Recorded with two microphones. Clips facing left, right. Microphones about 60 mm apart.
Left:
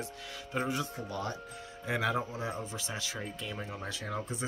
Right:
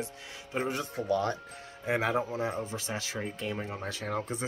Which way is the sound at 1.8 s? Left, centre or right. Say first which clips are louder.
Right 3 dB; right.